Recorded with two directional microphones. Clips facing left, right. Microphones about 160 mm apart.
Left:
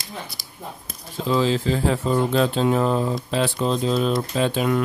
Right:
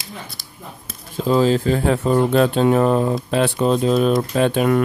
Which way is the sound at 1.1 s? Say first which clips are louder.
Right 5 dB; 45° right (ahead or behind).